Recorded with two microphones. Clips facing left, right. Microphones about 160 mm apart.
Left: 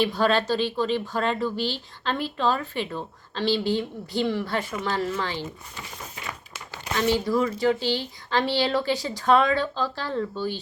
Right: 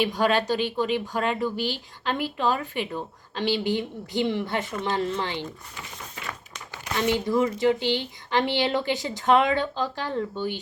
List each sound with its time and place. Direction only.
0.0 s speech: 15° right (ahead or behind)
6.9 s speech: 20° right (ahead or behind)